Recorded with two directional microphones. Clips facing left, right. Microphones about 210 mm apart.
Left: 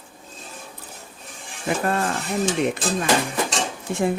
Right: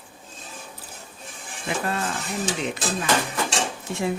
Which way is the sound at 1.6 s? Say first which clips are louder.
Left 4 dB; 50° left (ahead or behind).